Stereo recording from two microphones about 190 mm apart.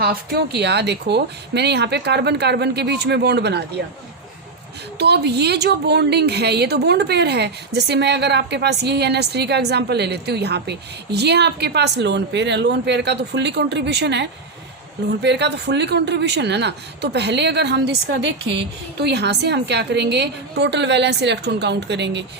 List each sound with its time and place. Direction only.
0.0 s a woman's voice: 55° right (ahead or behind)
4.9 s a woman's voice: 60° right (ahead or behind)